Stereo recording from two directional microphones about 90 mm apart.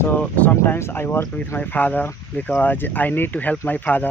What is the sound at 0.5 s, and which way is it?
Speech, 25° left (ahead or behind).